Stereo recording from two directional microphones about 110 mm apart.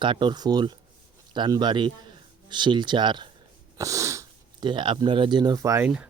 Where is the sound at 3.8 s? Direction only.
30° right (ahead or behind).